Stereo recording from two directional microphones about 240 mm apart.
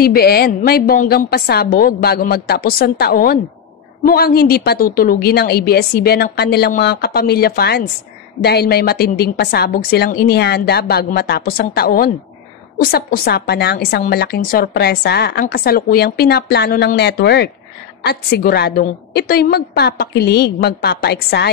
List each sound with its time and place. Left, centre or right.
0.0 s a woman's voice: left